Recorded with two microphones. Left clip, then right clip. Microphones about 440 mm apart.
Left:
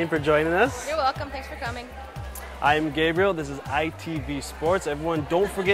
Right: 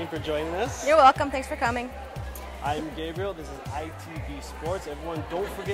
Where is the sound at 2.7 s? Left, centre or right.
Left.